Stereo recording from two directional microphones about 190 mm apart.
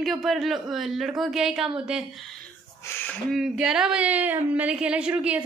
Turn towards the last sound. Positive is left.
turn(degrees=-5)  # may be behind; listen again after turning